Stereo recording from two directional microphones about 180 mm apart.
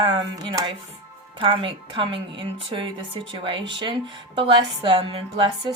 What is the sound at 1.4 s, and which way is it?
Speech, 30° right (ahead or behind).